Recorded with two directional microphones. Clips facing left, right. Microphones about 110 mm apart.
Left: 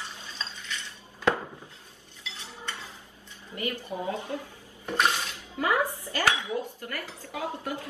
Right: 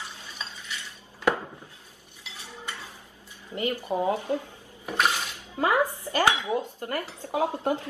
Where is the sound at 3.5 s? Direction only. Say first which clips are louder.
Right 5 dB; 25° right (ahead or behind).